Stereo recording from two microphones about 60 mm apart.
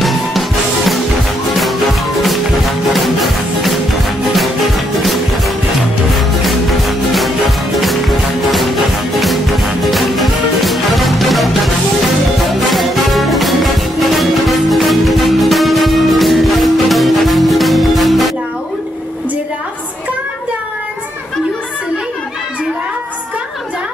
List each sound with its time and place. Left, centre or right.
0.0 s music: centre